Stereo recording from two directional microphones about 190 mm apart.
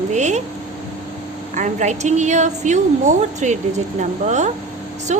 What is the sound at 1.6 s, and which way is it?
A woman's voice, 40° right (ahead or behind).